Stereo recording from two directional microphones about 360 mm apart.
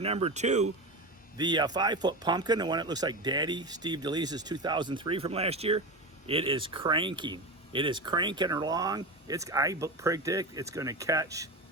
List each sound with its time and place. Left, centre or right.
0.0 s speech: centre